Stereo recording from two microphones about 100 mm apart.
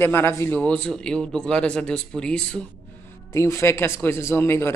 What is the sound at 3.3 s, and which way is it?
A man's voice, 25° left (ahead or behind).